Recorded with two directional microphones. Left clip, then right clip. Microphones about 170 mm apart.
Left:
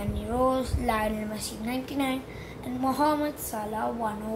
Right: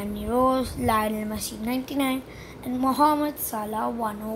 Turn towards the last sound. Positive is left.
turn(degrees=-45)  # may be behind; listen again after turning